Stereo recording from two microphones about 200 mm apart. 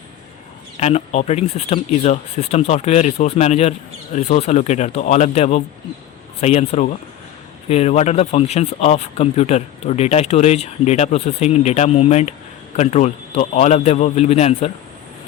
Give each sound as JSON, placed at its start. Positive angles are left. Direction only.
{"t": 0.8, "sound": "speech", "side_deg": 35}